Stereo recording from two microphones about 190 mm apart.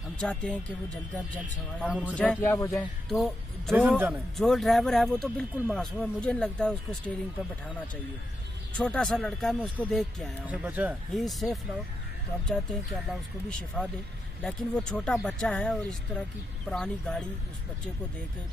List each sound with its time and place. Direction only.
0.2 s speech: 5° left (ahead or behind)
1.8 s speech: 5° right (ahead or behind)
2.1 s speech: 10° left (ahead or behind)
3.1 s speech: centre (ahead or behind)
8.7 s speech: 5° left (ahead or behind)
13.1 s speech: 5° left (ahead or behind)